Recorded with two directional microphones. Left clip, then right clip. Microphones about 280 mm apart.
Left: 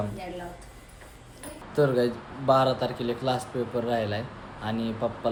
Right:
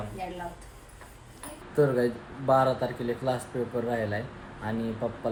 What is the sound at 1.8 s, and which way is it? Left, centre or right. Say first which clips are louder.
Speech: left 1 dB; centre.